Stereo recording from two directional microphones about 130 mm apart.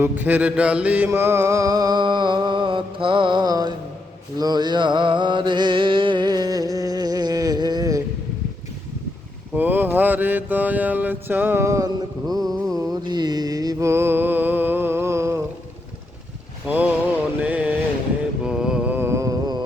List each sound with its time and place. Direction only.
0.0 s mantra: 15° right (ahead or behind); by 3.8 s 30° right (ahead or behind)
4.4 s a sound: 30° right (ahead or behind)
9.6 s mantra: 15° right (ahead or behind)
12.4 s mantra: centre (ahead or behind)
12.7 s mantra: 30° right (ahead or behind)
16.6 s a sound: 10° right (ahead or behind)
18.4 s mantra: 5° right (ahead or behind); by 19.6 s 30° right (ahead or behind)